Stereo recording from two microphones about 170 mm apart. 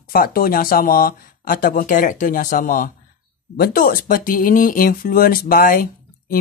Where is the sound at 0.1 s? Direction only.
60° left (ahead or behind).